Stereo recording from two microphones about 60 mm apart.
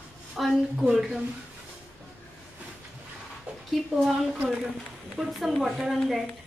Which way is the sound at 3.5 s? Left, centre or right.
Right.